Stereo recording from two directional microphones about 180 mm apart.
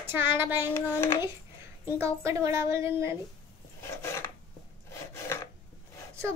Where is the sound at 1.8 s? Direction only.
15° right (ahead or behind).